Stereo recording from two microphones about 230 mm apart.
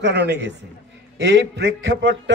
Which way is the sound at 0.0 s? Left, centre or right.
Right.